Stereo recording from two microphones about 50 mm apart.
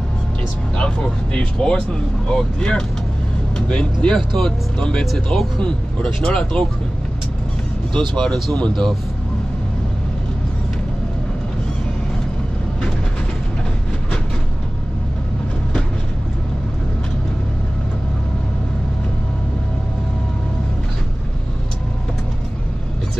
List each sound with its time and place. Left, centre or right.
0.7 s speech: centre
7.9 s speech: centre